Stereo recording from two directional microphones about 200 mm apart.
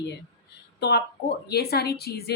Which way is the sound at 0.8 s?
55° left (ahead or behind).